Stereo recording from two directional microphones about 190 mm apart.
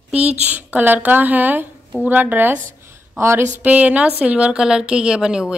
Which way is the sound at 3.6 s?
10° right (ahead or behind).